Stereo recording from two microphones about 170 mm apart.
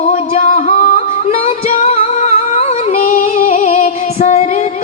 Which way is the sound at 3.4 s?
45° left (ahead or behind).